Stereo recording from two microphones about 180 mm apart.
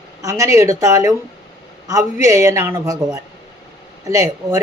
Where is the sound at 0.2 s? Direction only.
15° right (ahead or behind).